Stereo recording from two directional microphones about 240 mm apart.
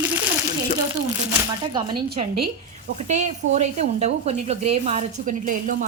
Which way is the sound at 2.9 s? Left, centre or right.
Right.